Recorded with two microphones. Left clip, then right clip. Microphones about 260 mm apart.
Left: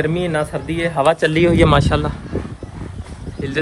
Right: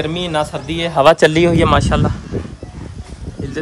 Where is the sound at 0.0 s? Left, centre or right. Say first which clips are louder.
Right 1 dB; centre.